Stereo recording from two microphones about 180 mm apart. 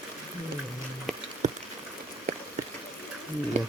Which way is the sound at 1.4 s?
40° right (ahead or behind).